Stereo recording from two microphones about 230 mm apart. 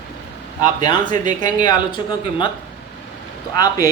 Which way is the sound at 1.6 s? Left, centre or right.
Centre.